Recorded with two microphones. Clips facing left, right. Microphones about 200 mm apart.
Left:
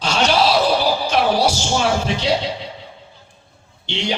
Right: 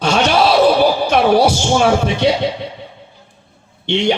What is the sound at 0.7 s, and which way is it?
Speech, 55° right (ahead or behind).